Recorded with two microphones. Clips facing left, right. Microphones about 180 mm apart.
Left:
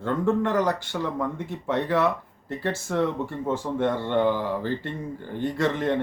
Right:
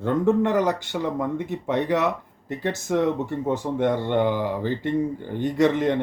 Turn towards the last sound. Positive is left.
turn(degrees=-15)  # may be behind; listen again after turning